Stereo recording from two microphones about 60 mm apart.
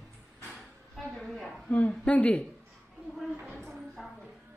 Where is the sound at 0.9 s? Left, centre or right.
Centre.